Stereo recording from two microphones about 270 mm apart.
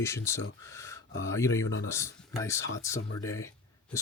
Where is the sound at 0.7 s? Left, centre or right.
Centre.